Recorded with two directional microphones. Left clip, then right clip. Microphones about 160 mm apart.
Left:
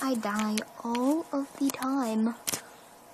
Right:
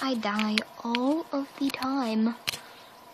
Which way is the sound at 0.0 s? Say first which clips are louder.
Right 1 dB; 5° left (ahead or behind).